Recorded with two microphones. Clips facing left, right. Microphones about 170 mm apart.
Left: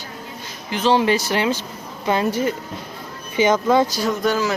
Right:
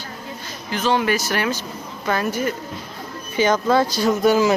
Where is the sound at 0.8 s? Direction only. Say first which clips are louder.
Left 3 dB; 30° left (ahead or behind).